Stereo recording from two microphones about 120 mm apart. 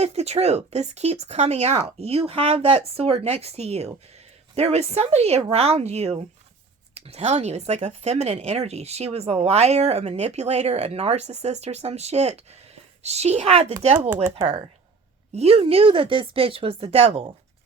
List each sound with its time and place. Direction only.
0.0 s speech: 65° right (ahead or behind)
15.4 s speech: 55° right (ahead or behind)